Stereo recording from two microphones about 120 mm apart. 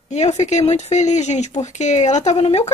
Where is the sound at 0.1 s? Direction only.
70° left (ahead or behind).